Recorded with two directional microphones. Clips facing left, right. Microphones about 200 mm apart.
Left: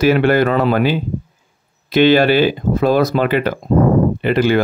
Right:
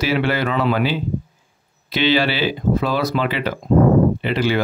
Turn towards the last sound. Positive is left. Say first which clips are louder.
# left 5 dB
turn(degrees=50)  # may be behind; listen again after turning